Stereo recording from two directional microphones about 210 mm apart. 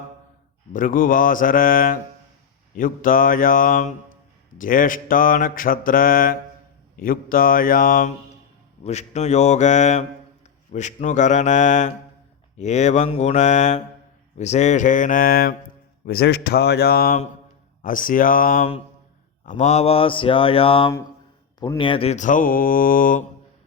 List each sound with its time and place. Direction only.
0.7 s mantra: 40° left (ahead or behind)
16.0 s speech: 50° left (ahead or behind)
17.8 s mantra: 40° left (ahead or behind)
19.5 s speech: 35° left (ahead or behind)
21.6 s mantra: 20° left (ahead or behind); by 23.2 s 40° left (ahead or behind)